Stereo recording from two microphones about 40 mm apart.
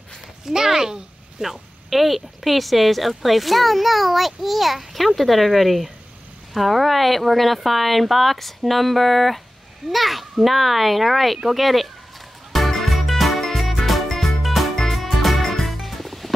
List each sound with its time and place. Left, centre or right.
0.5 s speech: centre
12.5 s music: centre